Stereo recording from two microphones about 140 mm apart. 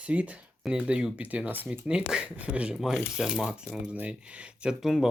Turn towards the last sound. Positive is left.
turn(degrees=-5)  # may be behind; listen again after turning